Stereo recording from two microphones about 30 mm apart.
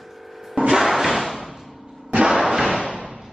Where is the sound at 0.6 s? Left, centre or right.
Right.